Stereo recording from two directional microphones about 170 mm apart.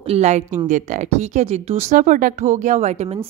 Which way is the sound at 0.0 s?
40° right (ahead or behind).